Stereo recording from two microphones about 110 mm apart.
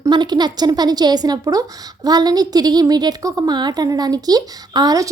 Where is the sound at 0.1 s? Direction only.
40° right (ahead or behind).